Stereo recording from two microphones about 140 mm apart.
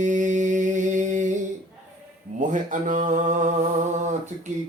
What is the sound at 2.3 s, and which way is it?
Mantra, 65° right (ahead or behind).